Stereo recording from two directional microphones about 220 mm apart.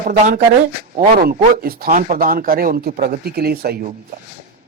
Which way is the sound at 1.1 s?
45° right (ahead or behind).